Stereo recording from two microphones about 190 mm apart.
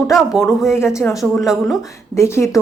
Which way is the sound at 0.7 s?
15° left (ahead or behind).